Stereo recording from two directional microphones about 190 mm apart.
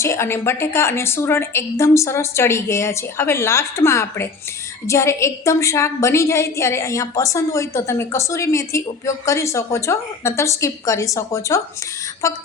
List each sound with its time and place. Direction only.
0.0 s a woman's voice: 15° left (ahead or behind)